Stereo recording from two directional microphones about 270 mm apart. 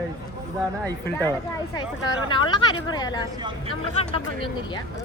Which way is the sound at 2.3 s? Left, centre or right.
Centre.